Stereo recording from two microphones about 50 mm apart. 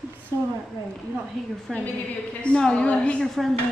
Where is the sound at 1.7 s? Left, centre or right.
Centre.